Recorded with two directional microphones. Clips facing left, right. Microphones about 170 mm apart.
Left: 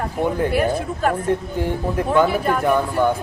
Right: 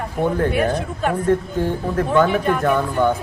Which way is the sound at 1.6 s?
10° left (ahead or behind).